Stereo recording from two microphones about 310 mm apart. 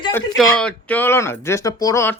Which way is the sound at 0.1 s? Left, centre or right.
Centre.